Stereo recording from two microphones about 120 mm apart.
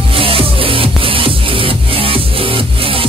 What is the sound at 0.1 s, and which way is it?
Music, 50° right (ahead or behind).